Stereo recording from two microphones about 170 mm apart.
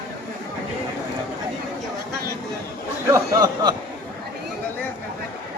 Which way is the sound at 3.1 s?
25° right (ahead or behind).